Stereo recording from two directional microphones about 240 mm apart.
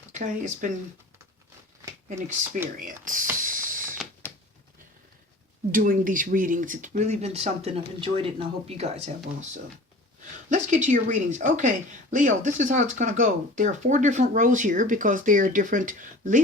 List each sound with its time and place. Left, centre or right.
0.1 s speech: right
2.0 s speech: right
3.4 s mechanisms: right
5.7 s speech: right
10.5 s speech: right